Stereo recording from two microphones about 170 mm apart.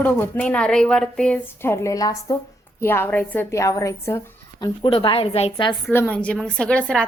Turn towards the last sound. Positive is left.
turn(degrees=5)  # may be behind; listen again after turning